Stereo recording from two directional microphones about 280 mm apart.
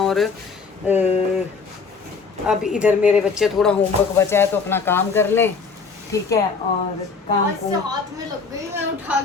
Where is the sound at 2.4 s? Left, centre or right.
Centre.